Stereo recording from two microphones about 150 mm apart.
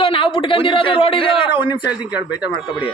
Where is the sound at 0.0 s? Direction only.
40° left (ahead or behind).